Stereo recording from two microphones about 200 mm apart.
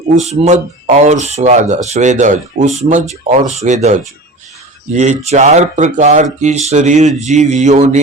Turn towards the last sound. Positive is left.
turn(degrees=-35)  # may be behind; listen again after turning